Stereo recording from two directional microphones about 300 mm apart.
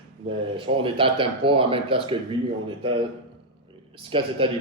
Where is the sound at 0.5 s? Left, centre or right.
Centre.